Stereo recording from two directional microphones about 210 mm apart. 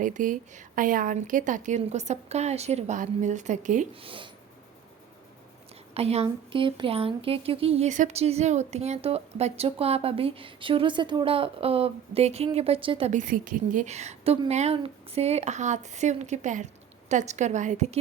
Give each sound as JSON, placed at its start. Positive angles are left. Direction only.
{"t": 0.0, "sound": "a woman's voice", "side_deg": -40}
{"t": 5.9, "sound": "a woman's voice", "side_deg": -30}